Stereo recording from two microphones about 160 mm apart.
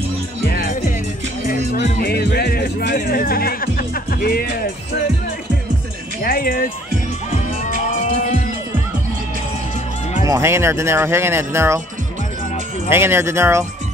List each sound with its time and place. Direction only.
1.4 s music: 60° left (ahead or behind)
6.2 s music: 65° left (ahead or behind)
7.2 s music: 45° left (ahead or behind)
10.2 s speech: 20° right (ahead or behind)
12.9 s speech: 15° right (ahead or behind)